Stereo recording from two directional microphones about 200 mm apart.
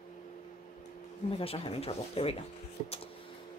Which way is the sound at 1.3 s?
30° left (ahead or behind).